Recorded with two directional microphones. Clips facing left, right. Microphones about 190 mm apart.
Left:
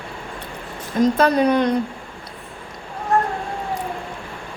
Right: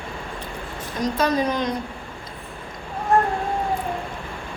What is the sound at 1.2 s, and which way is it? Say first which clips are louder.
Speech: left 2 dB; 60° left (ahead or behind).